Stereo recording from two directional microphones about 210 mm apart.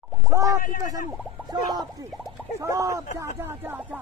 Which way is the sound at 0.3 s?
15° right (ahead or behind).